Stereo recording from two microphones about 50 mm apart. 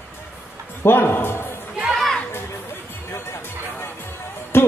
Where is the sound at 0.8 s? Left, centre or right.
Left.